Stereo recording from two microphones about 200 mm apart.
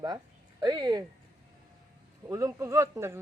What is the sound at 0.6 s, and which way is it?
Speech, 20° right (ahead or behind).